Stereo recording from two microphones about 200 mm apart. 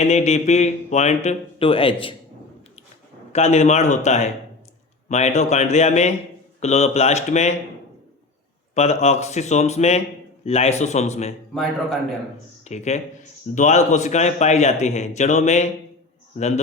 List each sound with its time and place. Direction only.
0.0 s speech: 35° left (ahead or behind)
3.3 s speech: 35° left (ahead or behind)
8.7 s speech: 35° left (ahead or behind)
11.5 s a man's voice: centre (ahead or behind)
12.6 s speech: 35° left (ahead or behind)